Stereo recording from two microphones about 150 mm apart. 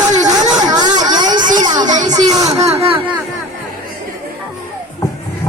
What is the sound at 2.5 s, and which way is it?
Speech, 45° right (ahead or behind).